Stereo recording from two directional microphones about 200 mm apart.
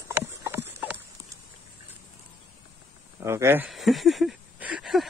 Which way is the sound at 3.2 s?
15° right (ahead or behind).